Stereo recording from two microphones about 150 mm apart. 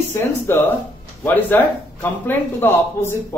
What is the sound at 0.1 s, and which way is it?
A man's voice, 15° left (ahead or behind).